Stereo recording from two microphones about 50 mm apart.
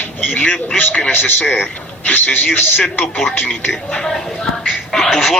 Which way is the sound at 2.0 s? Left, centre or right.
Left.